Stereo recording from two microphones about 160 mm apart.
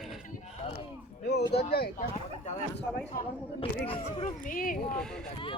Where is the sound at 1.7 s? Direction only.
80° left.